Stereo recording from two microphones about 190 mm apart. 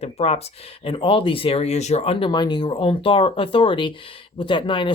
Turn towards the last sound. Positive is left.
turn(degrees=25)  # may be behind; listen again after turning